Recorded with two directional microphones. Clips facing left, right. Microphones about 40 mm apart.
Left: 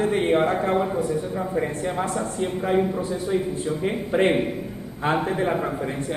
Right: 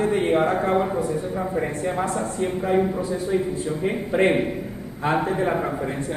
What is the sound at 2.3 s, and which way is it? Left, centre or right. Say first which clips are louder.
A man's voice: right 1 dB; left.